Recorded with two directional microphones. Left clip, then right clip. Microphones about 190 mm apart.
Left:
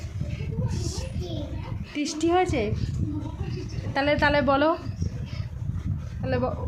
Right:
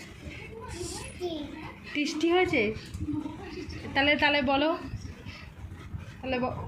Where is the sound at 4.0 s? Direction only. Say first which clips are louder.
Left 2 dB; 20° left (ahead or behind).